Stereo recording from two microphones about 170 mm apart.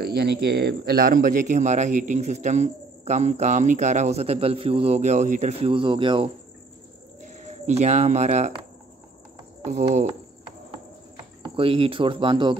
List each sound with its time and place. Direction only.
0.0 s speech: 70° right (ahead or behind); by 6.3 s 30° right (ahead or behind)
7.2 s speech: 45° right (ahead or behind)
9.7 s speech: 40° right (ahead or behind)
11.4 s speech: 30° right (ahead or behind)